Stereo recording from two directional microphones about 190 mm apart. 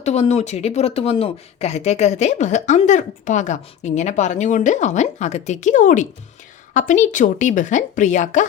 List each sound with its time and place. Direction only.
0.0 s speech: 35° left (ahead or behind)